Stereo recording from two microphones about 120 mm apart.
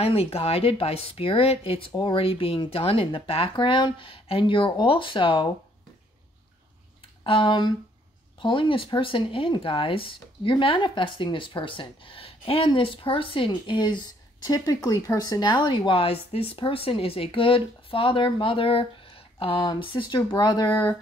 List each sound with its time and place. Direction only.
0.0 s speech: 55° left (ahead or behind)
7.2 s speech: 45° left (ahead or behind)